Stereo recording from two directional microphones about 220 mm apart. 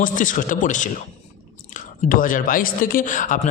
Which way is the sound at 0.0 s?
35° left (ahead or behind).